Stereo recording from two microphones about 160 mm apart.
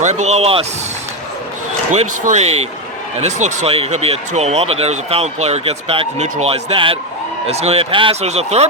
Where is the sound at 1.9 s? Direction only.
45° right (ahead or behind).